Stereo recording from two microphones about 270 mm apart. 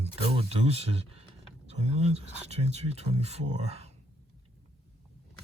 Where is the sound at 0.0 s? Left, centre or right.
Right.